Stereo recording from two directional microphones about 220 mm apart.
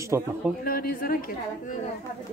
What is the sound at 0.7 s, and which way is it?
Speech, 40° left (ahead or behind).